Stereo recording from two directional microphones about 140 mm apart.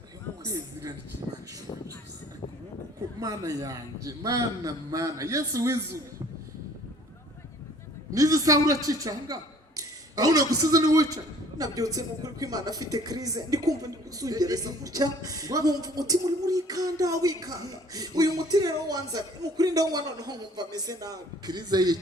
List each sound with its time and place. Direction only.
0.4 s a man's voice: 25° right (ahead or behind)
3.2 s a man's voice: 25° right (ahead or behind)
8.1 s a man's voice: 25° right (ahead or behind)